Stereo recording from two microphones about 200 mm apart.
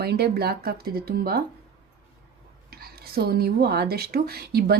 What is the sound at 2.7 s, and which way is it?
Speech, 50° right (ahead or behind).